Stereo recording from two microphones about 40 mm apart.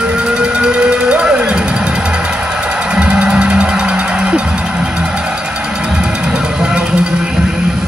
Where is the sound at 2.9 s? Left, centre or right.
Right.